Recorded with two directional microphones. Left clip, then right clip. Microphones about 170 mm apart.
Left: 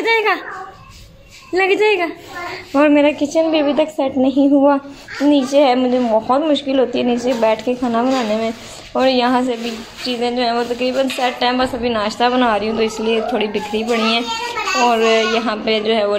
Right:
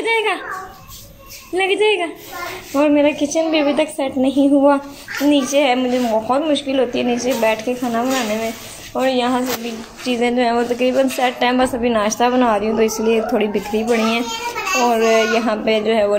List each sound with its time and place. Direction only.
0.0 s a child's voice: 10° left (ahead or behind)
1.5 s a woman's voice: 10° left (ahead or behind)
10.0 s a woman's voice: 25° right (ahead or behind)
12.2 s a child's voice: 10° right (ahead or behind)